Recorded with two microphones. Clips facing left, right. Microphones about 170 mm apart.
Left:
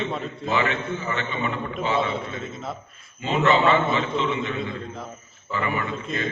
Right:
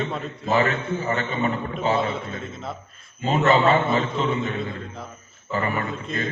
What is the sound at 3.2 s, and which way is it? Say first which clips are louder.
A man's voice: right 1 dB; 40° right (ahead or behind).